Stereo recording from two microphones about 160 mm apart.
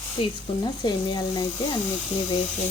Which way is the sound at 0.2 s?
25° left (ahead or behind).